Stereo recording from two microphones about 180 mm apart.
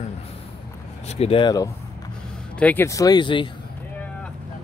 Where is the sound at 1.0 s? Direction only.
35° left (ahead or behind).